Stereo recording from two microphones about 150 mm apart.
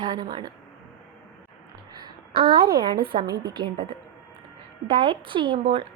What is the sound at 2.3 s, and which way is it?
Speech, 90° right.